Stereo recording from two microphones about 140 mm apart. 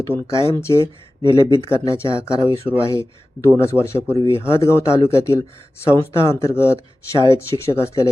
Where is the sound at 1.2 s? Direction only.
35° right (ahead or behind).